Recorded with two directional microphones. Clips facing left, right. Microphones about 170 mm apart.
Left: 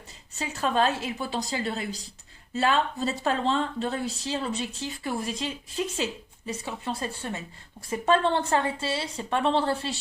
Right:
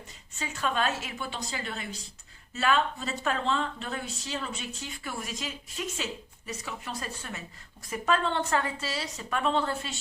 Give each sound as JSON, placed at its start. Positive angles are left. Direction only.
{"t": 0.3, "sound": "a woman's voice", "side_deg": 35}